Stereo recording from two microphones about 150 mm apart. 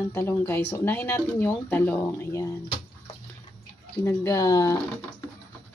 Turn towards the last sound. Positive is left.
turn(degrees=25)  # may be behind; listen again after turning